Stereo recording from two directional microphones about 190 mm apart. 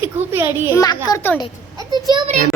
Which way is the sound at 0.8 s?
20° left (ahead or behind).